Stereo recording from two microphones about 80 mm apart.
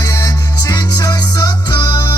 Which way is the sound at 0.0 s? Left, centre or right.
Left.